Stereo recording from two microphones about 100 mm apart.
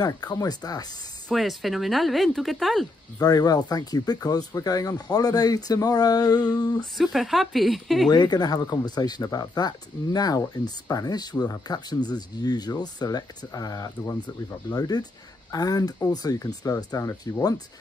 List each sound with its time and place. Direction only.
0.0 s speech: 40° left (ahead or behind)
1.3 s speech: centre (ahead or behind)
3.2 s speech: 40° left (ahead or behind)
6.8 s speech: centre (ahead or behind)
8.1 s speech: 45° left (ahead or behind)